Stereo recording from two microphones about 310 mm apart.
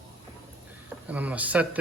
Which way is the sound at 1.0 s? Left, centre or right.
Centre.